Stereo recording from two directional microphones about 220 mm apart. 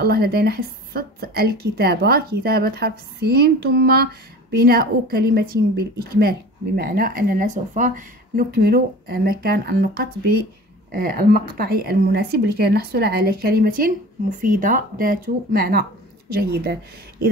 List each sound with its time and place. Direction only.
0.0 s a woman's voice: 45° right (ahead or behind)